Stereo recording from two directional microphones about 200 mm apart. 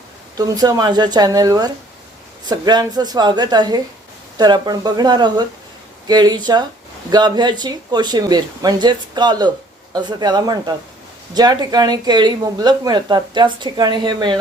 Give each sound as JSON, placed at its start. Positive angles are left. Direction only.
{"t": 0.3, "sound": "speech", "side_deg": -20}